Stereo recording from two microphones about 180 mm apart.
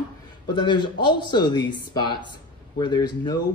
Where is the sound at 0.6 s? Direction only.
25° left (ahead or behind).